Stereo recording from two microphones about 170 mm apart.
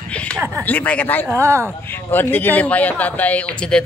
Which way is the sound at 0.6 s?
10° left (ahead or behind).